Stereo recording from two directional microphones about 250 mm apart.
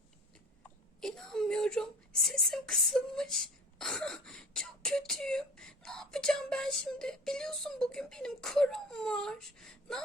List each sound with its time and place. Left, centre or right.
1.0 s whimper: centre